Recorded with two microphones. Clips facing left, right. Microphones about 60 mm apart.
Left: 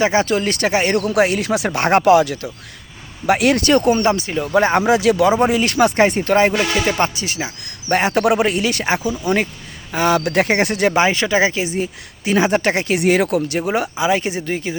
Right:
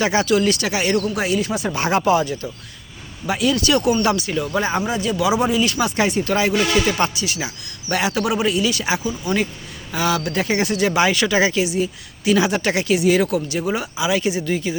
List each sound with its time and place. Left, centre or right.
0.0 s speech: left
1.0 s speech: left
3.2 s a man's voice: left
4.0 s speech: left
4.5 s speech: left
5.4 s a man's voice: left
6.6 s a man's voice: left
10.9 s speech: left
13.0 s a man's voice: left